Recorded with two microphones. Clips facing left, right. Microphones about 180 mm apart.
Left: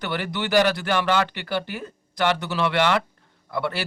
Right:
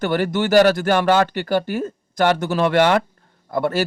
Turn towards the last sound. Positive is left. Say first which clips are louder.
# right 6 dB
turn(degrees=-45)  # may be behind; listen again after turning